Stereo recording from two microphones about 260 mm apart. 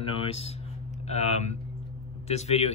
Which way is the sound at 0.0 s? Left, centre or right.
Left.